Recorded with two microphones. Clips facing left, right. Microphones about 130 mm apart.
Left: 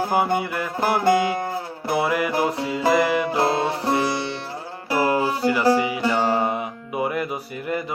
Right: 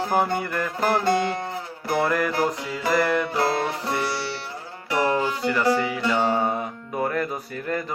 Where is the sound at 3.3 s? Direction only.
25° left (ahead or behind).